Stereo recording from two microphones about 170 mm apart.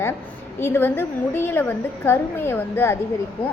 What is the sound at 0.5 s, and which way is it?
A woman's voice, 15° left (ahead or behind).